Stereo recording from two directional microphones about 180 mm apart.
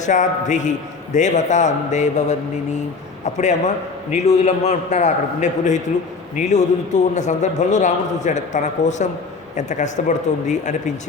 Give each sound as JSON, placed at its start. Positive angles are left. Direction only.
{"t": 0.0, "sound": "a man's voice", "side_deg": 45}